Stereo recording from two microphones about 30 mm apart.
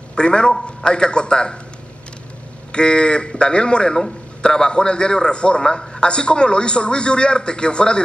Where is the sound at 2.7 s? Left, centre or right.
Left.